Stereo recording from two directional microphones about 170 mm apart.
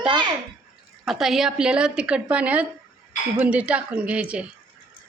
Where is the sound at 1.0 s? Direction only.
Centre (ahead or behind).